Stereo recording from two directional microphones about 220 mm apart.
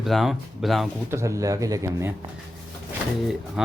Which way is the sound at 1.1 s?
15° right (ahead or behind).